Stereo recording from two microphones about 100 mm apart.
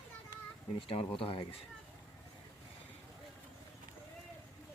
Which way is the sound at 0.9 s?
65° left (ahead or behind).